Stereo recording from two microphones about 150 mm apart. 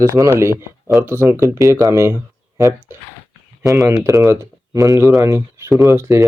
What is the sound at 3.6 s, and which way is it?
Speech, 25° right (ahead or behind).